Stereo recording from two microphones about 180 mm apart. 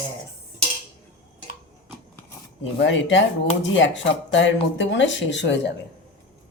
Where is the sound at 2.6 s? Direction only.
90° left.